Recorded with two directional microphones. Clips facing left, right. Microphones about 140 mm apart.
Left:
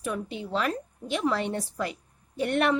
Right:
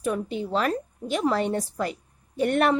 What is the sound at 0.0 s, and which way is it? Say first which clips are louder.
A woman's voice: right 5 dB; 40° right (ahead or behind).